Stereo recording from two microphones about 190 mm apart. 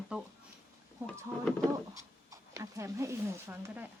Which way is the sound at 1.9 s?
15° right (ahead or behind).